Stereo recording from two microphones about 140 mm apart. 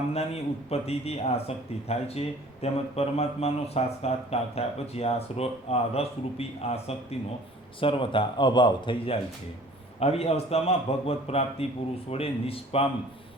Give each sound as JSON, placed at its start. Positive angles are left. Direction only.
{"t": 0.7, "sound": "speech", "side_deg": 45}
{"t": 10.0, "sound": "speech", "side_deg": 45}